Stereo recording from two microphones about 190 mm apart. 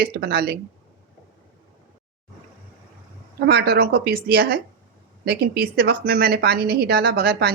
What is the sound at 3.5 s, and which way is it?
A woman's voice, 55° right (ahead or behind).